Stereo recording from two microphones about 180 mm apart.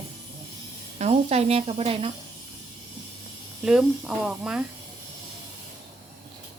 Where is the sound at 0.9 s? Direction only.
35° right (ahead or behind).